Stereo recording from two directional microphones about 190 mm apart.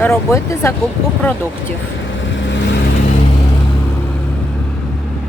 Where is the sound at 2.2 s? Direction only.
75° left (ahead or behind).